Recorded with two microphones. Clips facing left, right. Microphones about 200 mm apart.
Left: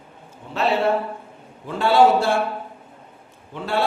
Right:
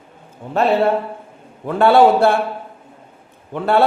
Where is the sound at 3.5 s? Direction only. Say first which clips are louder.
Right 8 dB; 60° right (ahead or behind).